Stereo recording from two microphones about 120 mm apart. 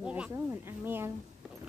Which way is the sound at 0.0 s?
10° right (ahead or behind).